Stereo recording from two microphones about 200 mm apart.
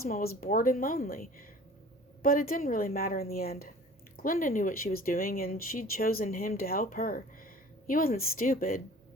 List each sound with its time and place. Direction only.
0.0 s speech: 50° left (ahead or behind)